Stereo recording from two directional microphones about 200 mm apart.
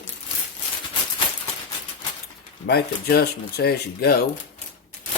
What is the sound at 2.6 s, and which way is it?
Speech, 50° left (ahead or behind).